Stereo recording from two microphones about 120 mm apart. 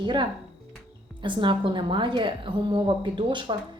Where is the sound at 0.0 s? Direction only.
40° right (ahead or behind).